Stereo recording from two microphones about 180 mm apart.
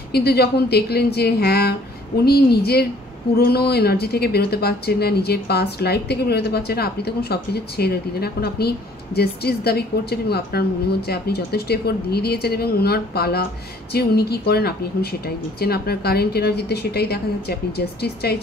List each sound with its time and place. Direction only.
0.1 s speech: 60° left (ahead or behind)